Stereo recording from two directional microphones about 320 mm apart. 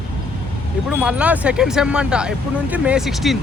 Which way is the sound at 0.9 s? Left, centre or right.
Centre.